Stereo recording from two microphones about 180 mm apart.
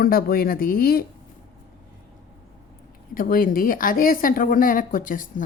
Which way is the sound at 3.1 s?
50° left (ahead or behind).